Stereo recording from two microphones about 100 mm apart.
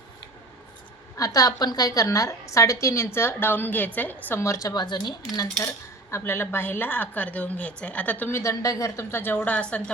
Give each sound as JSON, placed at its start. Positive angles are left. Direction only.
{"t": 1.1, "sound": "a woman's voice", "side_deg": 35}
{"t": 4.4, "sound": "a woman's voice", "side_deg": 30}
{"t": 4.7, "sound": "speech", "side_deg": 45}
{"t": 5.6, "sound": "speech", "side_deg": 25}
{"t": 8.3, "sound": "a woman's voice", "side_deg": 30}